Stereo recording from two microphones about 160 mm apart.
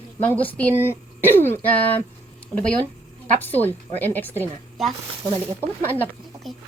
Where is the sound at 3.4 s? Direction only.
10° left (ahead or behind).